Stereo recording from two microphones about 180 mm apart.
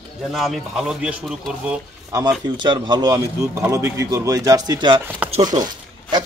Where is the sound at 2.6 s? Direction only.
25° right (ahead or behind).